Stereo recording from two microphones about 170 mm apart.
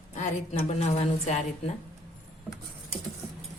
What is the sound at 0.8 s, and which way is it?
Speech, 40° left (ahead or behind).